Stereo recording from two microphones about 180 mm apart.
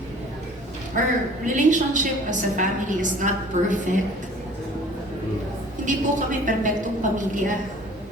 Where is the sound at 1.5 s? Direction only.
45° right (ahead or behind).